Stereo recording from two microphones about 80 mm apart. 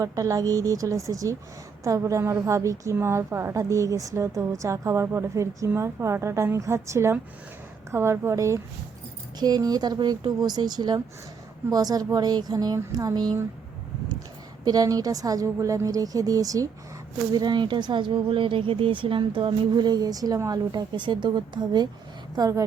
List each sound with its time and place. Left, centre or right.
0.0 s a woman's voice: right
9.4 s speech: right
11.7 s a woman's voice: right
14.6 s a woman's voice: right
17.3 s speech: right
22.4 s a woman's voice: right